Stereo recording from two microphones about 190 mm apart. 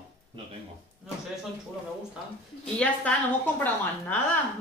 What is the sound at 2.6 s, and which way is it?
A woman's voice, 5° left (ahead or behind).